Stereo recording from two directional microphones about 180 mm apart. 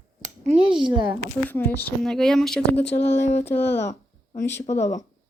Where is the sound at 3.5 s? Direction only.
10° left (ahead or behind).